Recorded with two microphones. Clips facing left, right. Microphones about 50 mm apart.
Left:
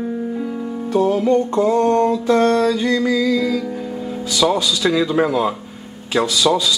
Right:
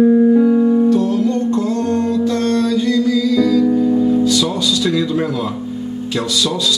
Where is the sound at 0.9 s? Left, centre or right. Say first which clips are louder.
Even; centre.